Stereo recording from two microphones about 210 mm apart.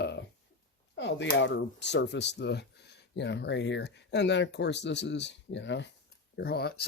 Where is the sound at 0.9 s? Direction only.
60° left (ahead or behind).